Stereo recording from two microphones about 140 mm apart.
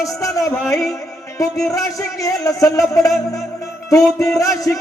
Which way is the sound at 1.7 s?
25° left (ahead or behind).